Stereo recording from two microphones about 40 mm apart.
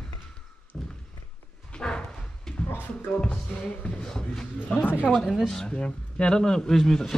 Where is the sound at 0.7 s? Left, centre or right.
Left.